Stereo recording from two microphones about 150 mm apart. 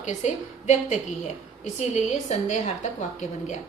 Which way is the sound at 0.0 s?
55° left (ahead or behind).